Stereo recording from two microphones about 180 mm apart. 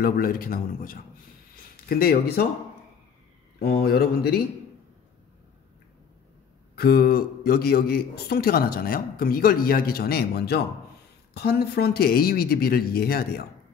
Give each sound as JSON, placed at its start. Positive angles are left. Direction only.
{"t": 0.0, "sound": "a man's voice", "side_deg": 55}
{"t": 3.5, "sound": "a man's voice", "side_deg": 60}
{"t": 6.7, "sound": "a man's voice", "side_deg": 60}